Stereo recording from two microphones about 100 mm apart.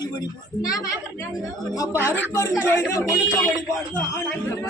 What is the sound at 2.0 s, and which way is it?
A woman's voice, 25° left (ahead or behind).